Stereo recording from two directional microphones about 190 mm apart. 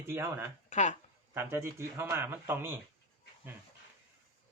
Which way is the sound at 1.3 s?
15° right (ahead or behind).